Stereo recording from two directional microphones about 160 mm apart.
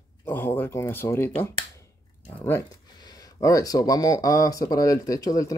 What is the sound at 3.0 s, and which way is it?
Speech, 25° left (ahead or behind).